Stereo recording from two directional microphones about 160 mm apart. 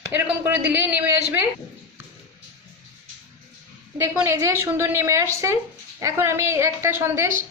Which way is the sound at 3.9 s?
15° right (ahead or behind).